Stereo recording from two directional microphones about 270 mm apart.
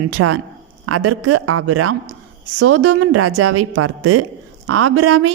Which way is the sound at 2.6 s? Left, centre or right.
Right.